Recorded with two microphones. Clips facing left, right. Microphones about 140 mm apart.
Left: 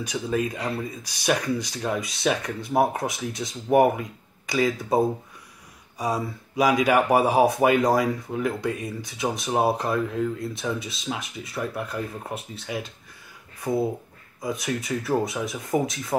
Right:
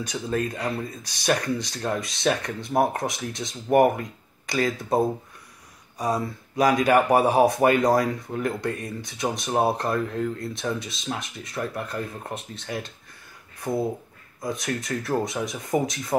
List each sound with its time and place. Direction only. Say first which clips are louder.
0.0 s speech: left 1 dB; 10° left (ahead or behind)